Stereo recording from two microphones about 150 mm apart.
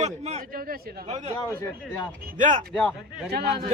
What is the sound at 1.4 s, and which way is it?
Speech, 20° left (ahead or behind).